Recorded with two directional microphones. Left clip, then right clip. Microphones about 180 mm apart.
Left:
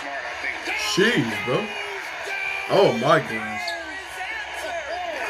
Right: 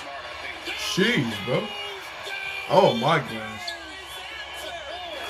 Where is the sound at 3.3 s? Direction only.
35° left (ahead or behind).